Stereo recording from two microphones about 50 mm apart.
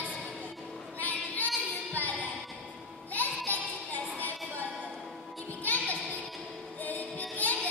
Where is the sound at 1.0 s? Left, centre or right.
Left.